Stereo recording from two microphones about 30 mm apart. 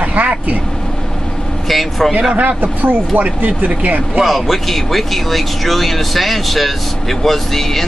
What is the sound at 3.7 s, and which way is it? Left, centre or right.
Speech, right.